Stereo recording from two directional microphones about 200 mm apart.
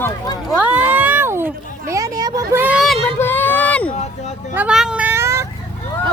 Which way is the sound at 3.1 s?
10° left (ahead or behind).